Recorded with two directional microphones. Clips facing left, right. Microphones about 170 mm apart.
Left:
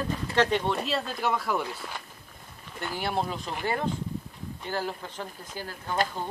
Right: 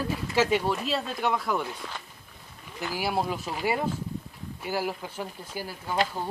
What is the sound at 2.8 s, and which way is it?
Speech, 5° right (ahead or behind).